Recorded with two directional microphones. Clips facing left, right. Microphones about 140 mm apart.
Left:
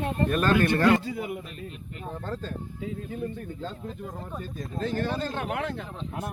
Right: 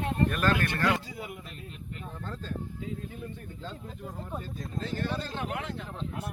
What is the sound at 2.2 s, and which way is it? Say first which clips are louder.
Speech: left 6 dB; 50° left (ahead or behind).